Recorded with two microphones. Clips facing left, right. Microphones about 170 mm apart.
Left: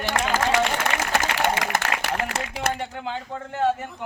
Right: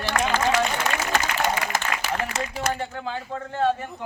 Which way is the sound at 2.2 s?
70° left (ahead or behind).